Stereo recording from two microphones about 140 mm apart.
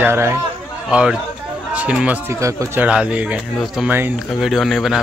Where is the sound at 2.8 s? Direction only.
10° right (ahead or behind).